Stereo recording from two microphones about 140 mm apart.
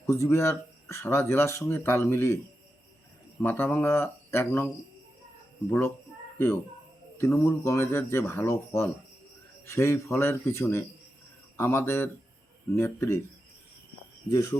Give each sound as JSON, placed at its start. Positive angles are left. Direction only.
{"t": 0.0, "sound": "speech", "side_deg": 20}
{"t": 3.4, "sound": "speech", "side_deg": 15}
{"t": 7.2, "sound": "speech", "side_deg": 20}
{"t": 14.3, "sound": "speech", "side_deg": 25}